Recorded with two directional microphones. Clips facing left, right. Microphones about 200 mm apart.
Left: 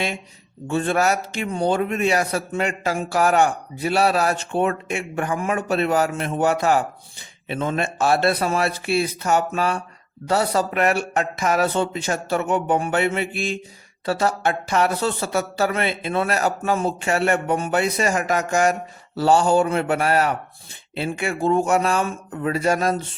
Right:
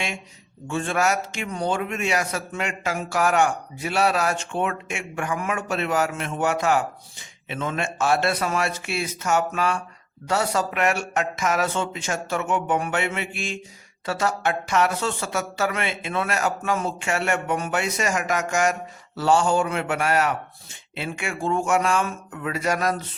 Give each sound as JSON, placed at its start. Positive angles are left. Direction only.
{"t": 0.7, "sound": "a man's voice", "side_deg": 35}